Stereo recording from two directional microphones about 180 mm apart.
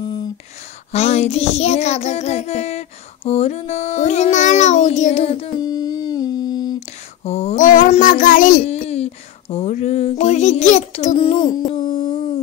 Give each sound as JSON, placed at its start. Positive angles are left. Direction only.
{"t": 0.0, "sound": "a sound", "side_deg": 20}
{"t": 0.9, "sound": "child singing", "side_deg": 35}
{"t": 6.9, "sound": "speech", "side_deg": 35}